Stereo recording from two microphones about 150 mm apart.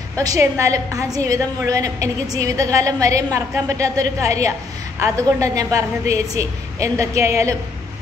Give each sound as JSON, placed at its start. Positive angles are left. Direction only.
{"t": 0.2, "sound": "a woman's voice", "side_deg": -20}